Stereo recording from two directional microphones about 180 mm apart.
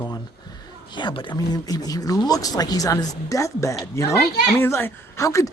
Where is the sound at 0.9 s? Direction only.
25° left (ahead or behind).